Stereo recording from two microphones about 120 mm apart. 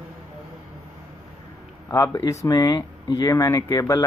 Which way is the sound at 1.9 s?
30° left (ahead or behind).